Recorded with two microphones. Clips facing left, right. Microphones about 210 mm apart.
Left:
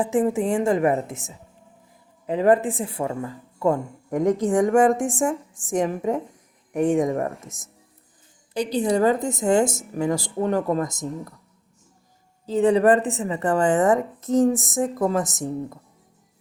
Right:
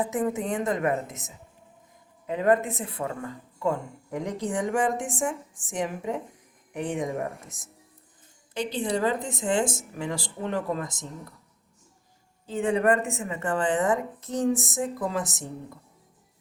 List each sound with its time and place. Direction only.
0.0 s a woman's voice: 30° left (ahead or behind)
3.6 s a woman's voice: 45° left (ahead or behind)
12.5 s speech: 35° left (ahead or behind)